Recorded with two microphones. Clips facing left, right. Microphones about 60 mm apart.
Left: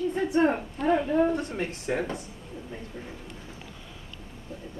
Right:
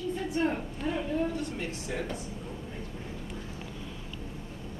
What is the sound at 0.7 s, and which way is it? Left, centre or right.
Speech, left.